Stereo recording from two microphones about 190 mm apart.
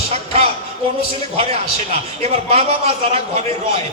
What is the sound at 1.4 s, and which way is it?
A man's voice, 35° right (ahead or behind).